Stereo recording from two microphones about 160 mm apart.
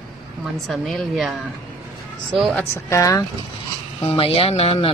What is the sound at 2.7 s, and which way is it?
Speech, 20° left (ahead or behind).